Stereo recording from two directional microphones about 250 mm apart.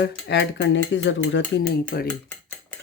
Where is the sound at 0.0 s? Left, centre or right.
Left.